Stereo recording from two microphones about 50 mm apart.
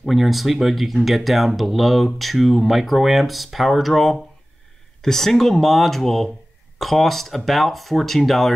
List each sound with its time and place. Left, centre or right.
0.0 s speech: centre